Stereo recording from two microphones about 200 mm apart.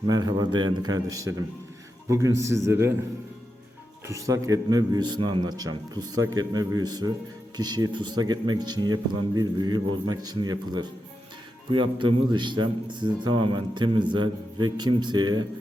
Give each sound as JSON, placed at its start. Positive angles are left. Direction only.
{"t": 0.0, "sound": "a man's voice", "side_deg": -20}
{"t": 4.0, "sound": "speech", "side_deg": -15}